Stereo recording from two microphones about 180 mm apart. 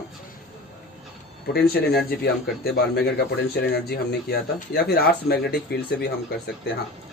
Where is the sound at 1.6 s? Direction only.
60° left (ahead or behind).